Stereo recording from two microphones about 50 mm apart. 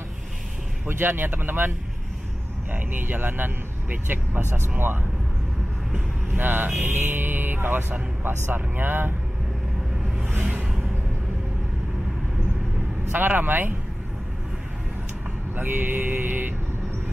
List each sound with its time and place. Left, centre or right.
0.8 s speech: right
2.7 s speech: right
6.2 s speech: right
10.0 s music: right
10.3 s a sound: right
13.1 s speech: right
15.5 s speech: right